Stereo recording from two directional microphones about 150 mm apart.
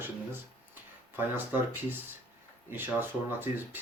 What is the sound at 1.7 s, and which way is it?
Speech, 15° right (ahead or behind).